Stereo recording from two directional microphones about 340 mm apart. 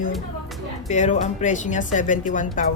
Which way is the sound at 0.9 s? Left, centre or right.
Left.